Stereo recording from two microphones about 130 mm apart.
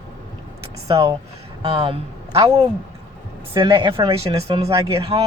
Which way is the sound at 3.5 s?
35° right (ahead or behind).